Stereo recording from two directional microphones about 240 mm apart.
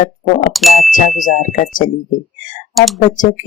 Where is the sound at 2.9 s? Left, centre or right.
Left.